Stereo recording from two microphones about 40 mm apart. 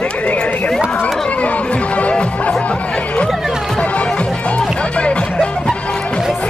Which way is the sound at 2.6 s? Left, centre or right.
Left.